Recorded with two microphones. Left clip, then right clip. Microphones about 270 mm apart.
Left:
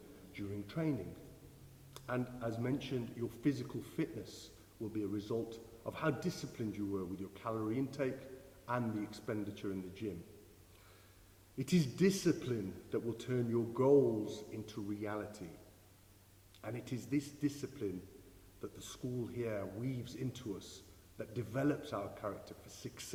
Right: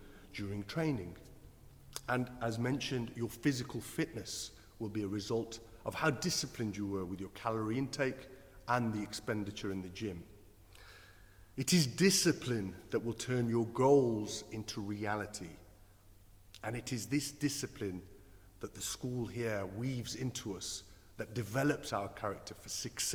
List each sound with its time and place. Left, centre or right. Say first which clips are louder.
0.3 s a man's voice: right 3 dB; right
11.5 s a man's voice: right 4 dB; right
16.6 s a man's voice: right 4 dB; right